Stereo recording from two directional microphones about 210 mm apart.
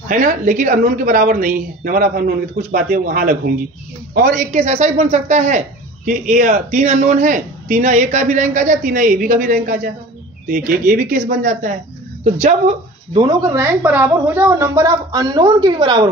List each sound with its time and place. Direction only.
0.1 s a woman's voice: 40° right (ahead or behind); by 16.1 s 20° right (ahead or behind)